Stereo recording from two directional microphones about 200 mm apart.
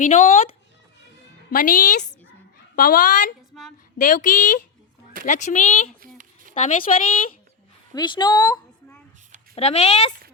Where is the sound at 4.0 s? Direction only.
40° left (ahead or behind).